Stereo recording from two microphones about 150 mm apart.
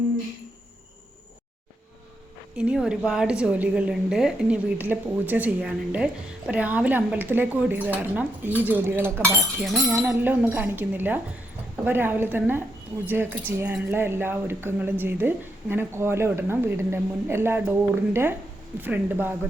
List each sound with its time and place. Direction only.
2.6 s a woman's voice: 5° right (ahead or behind)
9.6 s speech: centre (ahead or behind)
10.0 s a woman's voice: 15° right (ahead or behind)